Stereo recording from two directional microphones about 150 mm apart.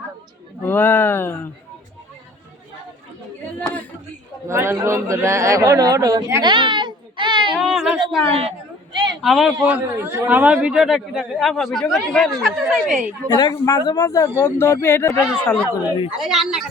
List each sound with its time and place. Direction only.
0.6 s speech: 15° left (ahead or behind)
4.4 s a man's voice: 15° right (ahead or behind)
6.4 s a sound: 30° right (ahead or behind)
7.6 s speech: 5° right (ahead or behind)
8.3 s a sound: 40° right (ahead or behind)
9.2 s a man's voice: centre (ahead or behind)
13.2 s a man's voice: 25° left (ahead or behind)
15.2 s a man's voice: 5° right (ahead or behind)